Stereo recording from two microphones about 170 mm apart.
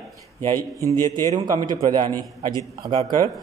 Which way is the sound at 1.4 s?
25° right (ahead or behind).